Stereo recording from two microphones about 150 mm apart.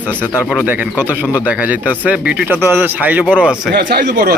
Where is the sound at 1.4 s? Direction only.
10° right (ahead or behind).